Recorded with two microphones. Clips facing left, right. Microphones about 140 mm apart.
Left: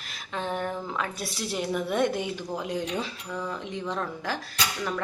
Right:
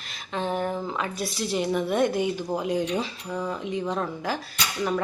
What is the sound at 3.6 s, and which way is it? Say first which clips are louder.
Speech: right 4 dB; 5° right (ahead or behind).